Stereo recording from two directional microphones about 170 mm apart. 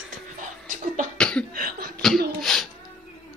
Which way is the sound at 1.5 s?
55° right (ahead or behind).